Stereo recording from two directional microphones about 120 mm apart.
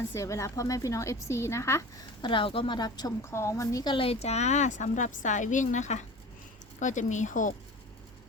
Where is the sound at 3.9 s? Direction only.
55° left (ahead or behind); by 7.5 s 90° left.